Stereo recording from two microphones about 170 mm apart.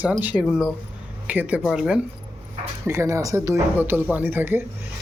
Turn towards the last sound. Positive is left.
turn(degrees=-10)  # may be behind; listen again after turning